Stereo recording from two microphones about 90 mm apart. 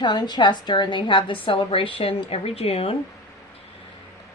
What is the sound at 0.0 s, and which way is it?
A woman's voice, 55° left (ahead or behind).